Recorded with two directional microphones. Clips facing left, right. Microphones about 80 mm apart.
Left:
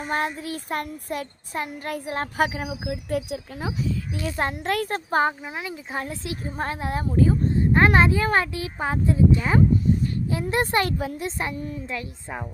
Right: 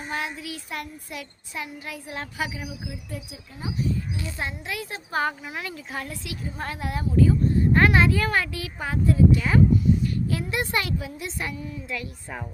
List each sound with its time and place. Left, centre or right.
0.0 s child singing: left
4.2 s child singing: left
5.2 s speech: centre; by 11.4 s left
11.5 s child singing: left